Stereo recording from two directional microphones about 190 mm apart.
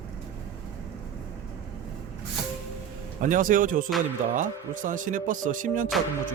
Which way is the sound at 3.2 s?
45° right (ahead or behind).